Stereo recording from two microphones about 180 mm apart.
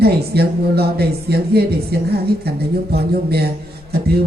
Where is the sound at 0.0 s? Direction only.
60° right (ahead or behind).